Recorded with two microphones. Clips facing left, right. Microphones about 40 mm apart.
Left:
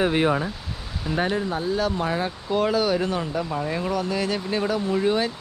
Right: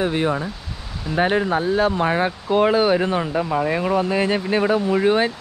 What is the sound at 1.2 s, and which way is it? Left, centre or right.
Speech, right.